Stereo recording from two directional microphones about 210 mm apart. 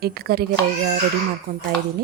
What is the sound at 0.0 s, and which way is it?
Speech, 45° right (ahead or behind).